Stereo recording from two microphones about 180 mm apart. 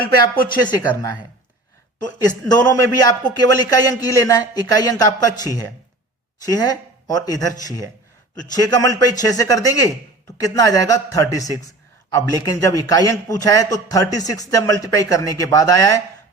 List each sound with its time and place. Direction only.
0.4 s speech: 25° left (ahead or behind)